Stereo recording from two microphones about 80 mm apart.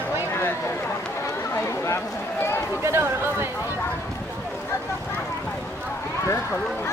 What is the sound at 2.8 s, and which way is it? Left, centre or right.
Speech, right.